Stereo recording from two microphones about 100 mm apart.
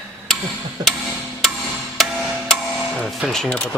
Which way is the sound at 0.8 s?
40° right (ahead or behind).